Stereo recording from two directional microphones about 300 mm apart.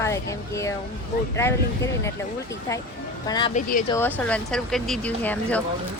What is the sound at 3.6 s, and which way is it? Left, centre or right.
Speech, left.